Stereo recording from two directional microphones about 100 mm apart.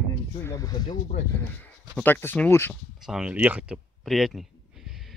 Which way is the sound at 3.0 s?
5° right (ahead or behind).